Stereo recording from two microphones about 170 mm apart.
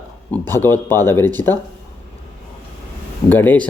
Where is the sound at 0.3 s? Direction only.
10° left (ahead or behind).